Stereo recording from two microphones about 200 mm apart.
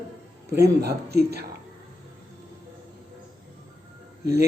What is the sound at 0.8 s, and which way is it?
Speech, 55° right (ahead or behind).